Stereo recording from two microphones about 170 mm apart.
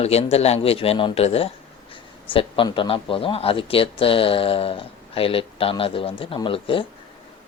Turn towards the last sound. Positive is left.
turn(degrees=30)  # may be behind; listen again after turning